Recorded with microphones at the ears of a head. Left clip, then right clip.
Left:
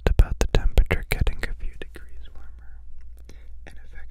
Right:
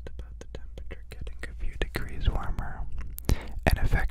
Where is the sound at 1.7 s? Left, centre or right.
Right.